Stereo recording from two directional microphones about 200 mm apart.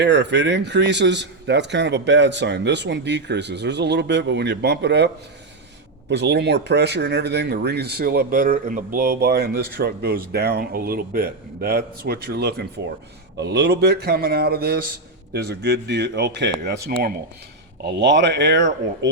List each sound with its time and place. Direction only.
0.0 s a man's voice: 60° right (ahead or behind)